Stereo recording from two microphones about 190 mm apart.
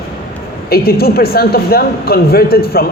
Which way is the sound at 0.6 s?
55° left (ahead or behind).